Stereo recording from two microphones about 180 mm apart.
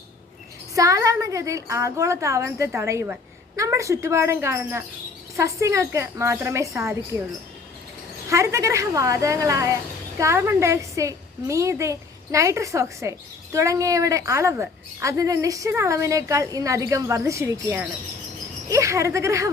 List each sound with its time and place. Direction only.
0.8 s a woman's voice: 20° right (ahead or behind)
8.3 s a woman's voice: 15° right (ahead or behind)